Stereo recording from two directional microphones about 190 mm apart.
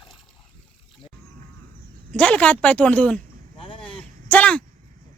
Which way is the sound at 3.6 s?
25° left (ahead or behind).